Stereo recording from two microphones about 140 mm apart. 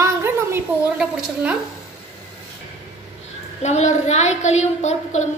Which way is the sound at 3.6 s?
55° left (ahead or behind).